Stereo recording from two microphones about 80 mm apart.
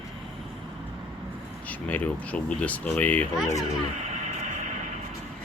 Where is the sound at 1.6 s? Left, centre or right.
Centre.